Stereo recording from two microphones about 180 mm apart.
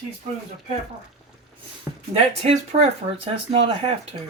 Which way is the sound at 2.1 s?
35° right (ahead or behind).